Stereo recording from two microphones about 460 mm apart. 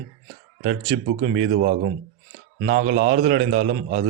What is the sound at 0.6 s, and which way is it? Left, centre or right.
Speech, centre.